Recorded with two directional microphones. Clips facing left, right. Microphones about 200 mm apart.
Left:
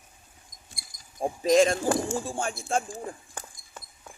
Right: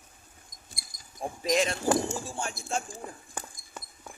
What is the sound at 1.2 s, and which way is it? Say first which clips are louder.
Speech: left 7 dB; 45° left (ahead or behind).